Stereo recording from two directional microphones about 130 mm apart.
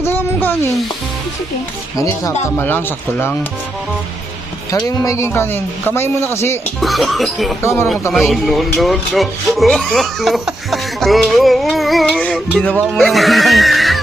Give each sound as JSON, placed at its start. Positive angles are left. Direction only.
{"t": 0.0, "sound": "music", "side_deg": 15}
{"t": 2.0, "sound": "speech", "side_deg": 25}
{"t": 4.7, "sound": "speech", "side_deg": 25}
{"t": 6.7, "sound": "speech", "side_deg": 0}
{"t": 7.6, "sound": "speech", "side_deg": 20}
{"t": 8.3, "sound": "speech", "side_deg": 0}